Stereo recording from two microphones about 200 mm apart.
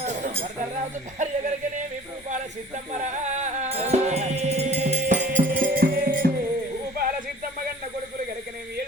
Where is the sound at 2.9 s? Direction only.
35° right (ahead or behind).